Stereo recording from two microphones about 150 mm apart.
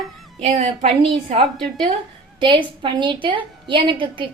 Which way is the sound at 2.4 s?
30° right (ahead or behind).